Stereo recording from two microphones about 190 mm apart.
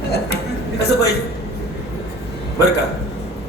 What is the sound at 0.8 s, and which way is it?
Speech, 60° left (ahead or behind).